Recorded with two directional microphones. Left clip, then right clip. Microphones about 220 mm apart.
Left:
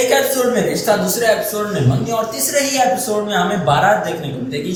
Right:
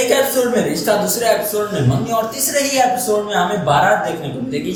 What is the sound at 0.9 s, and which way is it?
Speech, 5° right (ahead or behind).